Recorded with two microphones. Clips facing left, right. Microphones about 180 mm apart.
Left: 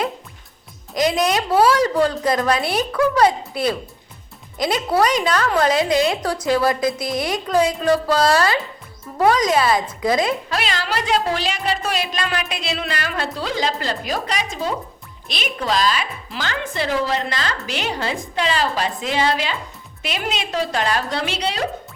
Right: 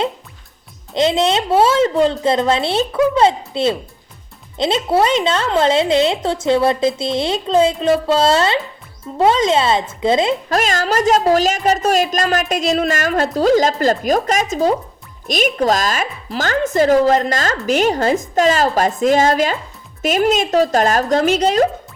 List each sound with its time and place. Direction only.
0.9 s a woman's voice: 25° right (ahead or behind)
10.5 s a woman's voice: 45° right (ahead or behind)